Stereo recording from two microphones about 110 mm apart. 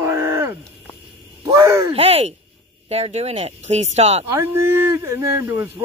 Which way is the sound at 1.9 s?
65° right (ahead or behind).